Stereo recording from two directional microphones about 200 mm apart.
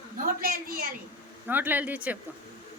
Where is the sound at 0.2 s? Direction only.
45° right (ahead or behind).